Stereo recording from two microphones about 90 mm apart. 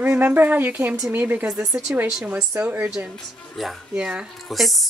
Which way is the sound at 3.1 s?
5° left (ahead or behind).